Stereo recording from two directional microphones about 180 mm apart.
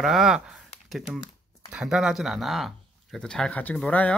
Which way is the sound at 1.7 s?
5° right (ahead or behind).